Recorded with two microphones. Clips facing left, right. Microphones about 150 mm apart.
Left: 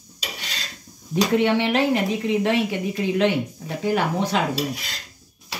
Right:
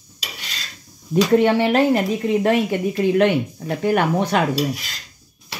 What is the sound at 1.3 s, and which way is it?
A woman's voice, 40° right (ahead or behind).